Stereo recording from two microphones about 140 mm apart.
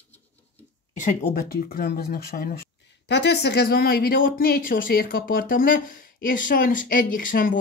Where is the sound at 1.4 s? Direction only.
90° left.